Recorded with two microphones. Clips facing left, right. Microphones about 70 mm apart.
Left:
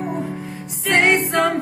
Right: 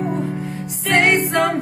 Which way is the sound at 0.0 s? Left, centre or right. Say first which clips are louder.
Right 3 dB; centre.